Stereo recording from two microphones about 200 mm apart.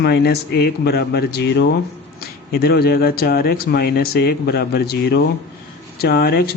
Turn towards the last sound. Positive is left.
turn(degrees=50)  # may be behind; listen again after turning